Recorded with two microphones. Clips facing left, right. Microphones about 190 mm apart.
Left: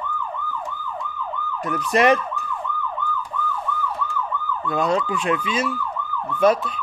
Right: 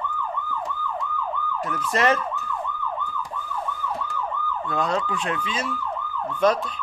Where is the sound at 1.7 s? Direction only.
15° left (ahead or behind).